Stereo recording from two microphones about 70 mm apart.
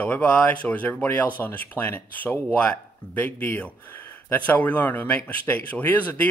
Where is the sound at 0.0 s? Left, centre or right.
Left.